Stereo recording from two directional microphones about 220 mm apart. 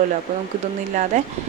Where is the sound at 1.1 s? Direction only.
35° right (ahead or behind).